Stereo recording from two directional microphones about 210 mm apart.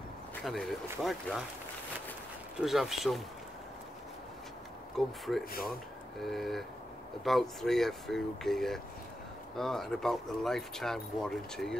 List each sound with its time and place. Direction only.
0.4 s speech: centre (ahead or behind)
2.6 s speech: centre (ahead or behind)
4.9 s speech: centre (ahead or behind)
5.4 s speech: 45° left (ahead or behind)
6.2 s speech: centre (ahead or behind)